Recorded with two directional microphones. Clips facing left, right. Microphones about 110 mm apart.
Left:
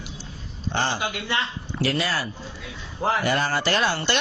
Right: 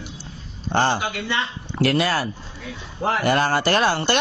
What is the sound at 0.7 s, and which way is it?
A man's voice, 50° right (ahead or behind).